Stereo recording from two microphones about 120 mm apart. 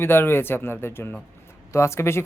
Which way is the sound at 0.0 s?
20° left (ahead or behind).